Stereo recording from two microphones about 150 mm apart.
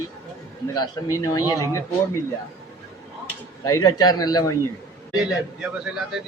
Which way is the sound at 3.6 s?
25° left (ahead or behind).